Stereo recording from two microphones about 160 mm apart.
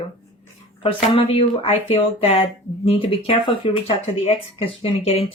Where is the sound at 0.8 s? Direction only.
35° left (ahead or behind).